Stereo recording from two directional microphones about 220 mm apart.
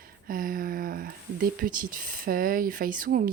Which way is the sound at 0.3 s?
40° right (ahead or behind).